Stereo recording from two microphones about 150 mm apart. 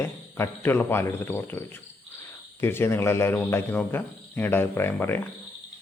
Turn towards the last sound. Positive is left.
turn(degrees=15)  # may be behind; listen again after turning